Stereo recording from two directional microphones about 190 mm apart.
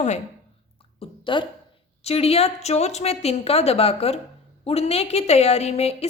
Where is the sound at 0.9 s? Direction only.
25° left (ahead or behind).